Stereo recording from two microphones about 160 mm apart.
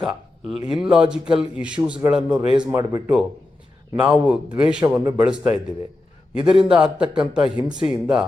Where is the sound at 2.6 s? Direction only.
20° right (ahead or behind).